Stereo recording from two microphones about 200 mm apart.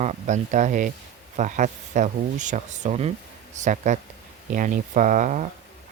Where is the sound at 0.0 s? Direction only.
35° right (ahead or behind).